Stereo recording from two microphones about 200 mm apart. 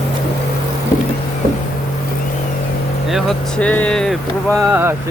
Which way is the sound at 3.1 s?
Centre (ahead or behind).